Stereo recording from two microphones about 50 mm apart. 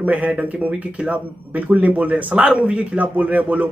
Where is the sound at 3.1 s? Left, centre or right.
Right.